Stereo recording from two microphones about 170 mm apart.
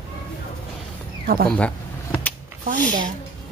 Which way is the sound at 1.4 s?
5° left (ahead or behind).